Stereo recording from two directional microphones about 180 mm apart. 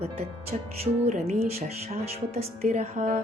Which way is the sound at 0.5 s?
40° right (ahead or behind).